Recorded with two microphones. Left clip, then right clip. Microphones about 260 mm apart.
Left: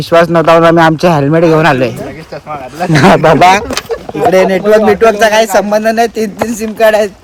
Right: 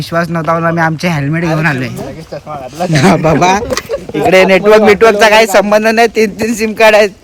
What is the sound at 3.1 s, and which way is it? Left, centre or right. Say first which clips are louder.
Speech: left 6 dB; left.